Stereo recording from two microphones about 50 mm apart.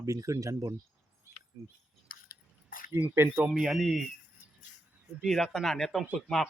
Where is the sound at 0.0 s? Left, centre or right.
Right.